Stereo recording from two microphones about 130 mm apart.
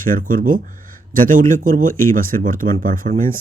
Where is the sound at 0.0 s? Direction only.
90° right.